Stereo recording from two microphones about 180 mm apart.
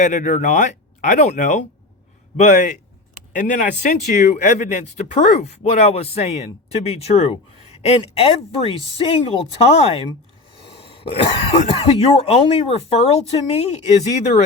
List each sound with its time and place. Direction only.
0.0 s speech: 45° left (ahead or behind)